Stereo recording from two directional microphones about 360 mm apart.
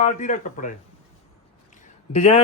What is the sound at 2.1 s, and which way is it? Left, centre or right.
Speech, centre.